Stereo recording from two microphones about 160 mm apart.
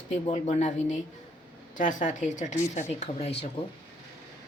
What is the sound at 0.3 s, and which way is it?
Speech, 45° left (ahead or behind).